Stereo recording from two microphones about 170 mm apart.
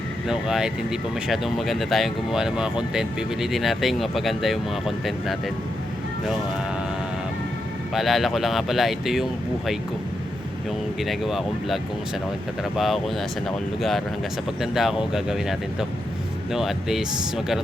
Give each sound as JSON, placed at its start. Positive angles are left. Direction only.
{"t": 0.3, "sound": "speech", "side_deg": -5}
{"t": 7.9, "sound": "speech", "side_deg": 0}
{"t": 11.0, "sound": "speech", "side_deg": 0}
{"t": 14.6, "sound": "speech", "side_deg": 0}